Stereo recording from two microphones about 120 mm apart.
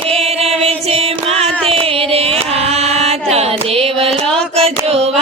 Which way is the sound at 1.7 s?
50° right (ahead or behind).